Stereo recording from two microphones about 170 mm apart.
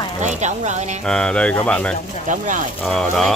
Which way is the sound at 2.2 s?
50° right (ahead or behind).